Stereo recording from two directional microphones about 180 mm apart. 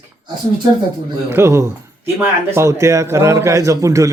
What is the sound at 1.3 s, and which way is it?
A man's voice, 15° right (ahead or behind).